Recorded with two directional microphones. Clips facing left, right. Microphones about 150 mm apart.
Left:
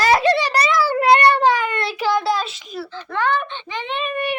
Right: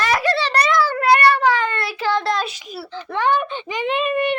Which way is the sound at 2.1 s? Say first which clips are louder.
Left 1 dB; 10° left (ahead or behind).